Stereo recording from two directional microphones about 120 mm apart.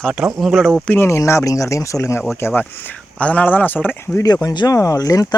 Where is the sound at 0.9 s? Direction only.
20° left (ahead or behind).